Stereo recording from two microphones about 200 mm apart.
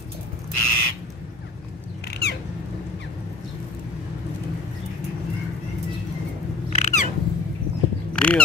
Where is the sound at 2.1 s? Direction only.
55° left (ahead or behind).